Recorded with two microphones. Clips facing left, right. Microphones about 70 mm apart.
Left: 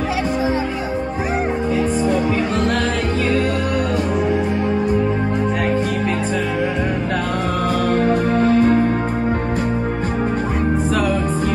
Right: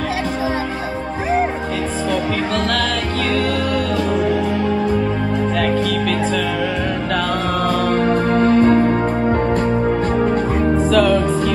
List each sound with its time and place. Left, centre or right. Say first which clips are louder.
7.9 s music: even; right
10.9 s music: right 4 dB; left